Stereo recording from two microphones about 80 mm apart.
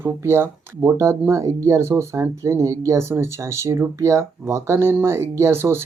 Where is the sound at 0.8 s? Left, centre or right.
Right.